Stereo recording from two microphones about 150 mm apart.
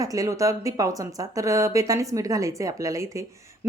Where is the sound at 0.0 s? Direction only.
20° right (ahead or behind).